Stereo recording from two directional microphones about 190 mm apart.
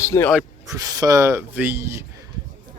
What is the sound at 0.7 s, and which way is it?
A man's voice, 20° right (ahead or behind).